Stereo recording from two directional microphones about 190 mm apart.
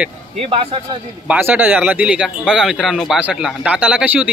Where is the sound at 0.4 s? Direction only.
30° right (ahead or behind).